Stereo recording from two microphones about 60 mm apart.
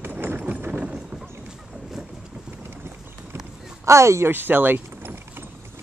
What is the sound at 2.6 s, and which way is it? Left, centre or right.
Run, right.